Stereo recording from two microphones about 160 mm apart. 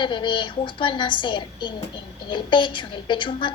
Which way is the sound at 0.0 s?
30° left (ahead or behind).